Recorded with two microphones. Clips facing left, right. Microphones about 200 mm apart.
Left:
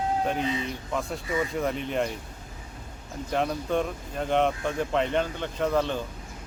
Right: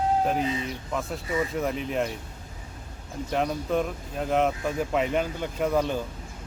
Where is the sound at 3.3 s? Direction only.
Centre (ahead or behind).